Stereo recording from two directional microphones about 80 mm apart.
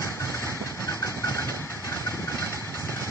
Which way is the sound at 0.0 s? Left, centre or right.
Left.